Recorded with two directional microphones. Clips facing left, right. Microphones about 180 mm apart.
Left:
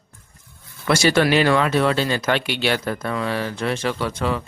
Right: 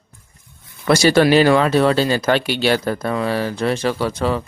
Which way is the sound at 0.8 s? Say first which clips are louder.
Right 4 dB; 35° right (ahead or behind).